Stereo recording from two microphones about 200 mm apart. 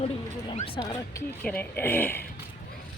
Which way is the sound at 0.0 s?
30° left (ahead or behind).